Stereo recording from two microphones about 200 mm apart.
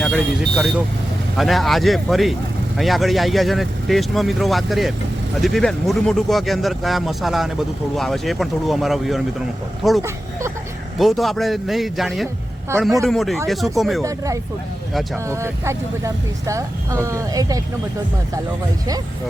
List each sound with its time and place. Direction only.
0.0 s speech: centre (ahead or behind)
15.3 s speech: 15° right (ahead or behind)